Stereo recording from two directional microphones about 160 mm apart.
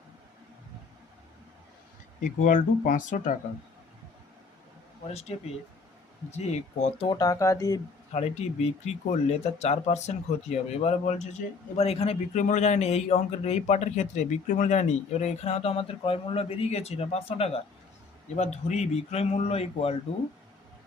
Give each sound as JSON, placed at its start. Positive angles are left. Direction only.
{"t": 2.2, "sound": "speech", "side_deg": 55}
{"t": 5.0, "sound": "speech", "side_deg": 40}
{"t": 7.1, "sound": "speech", "side_deg": 20}
{"t": 8.1, "sound": "speech", "side_deg": 40}